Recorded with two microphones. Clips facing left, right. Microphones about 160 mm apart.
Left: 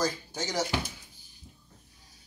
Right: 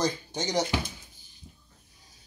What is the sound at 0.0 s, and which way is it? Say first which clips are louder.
Speech: right 2 dB; 20° right (ahead or behind).